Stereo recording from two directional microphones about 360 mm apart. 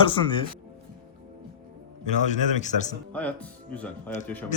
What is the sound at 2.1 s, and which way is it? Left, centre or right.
Speech, centre.